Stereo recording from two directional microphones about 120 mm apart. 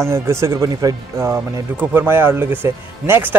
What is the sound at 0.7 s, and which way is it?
Speech, 35° right (ahead or behind).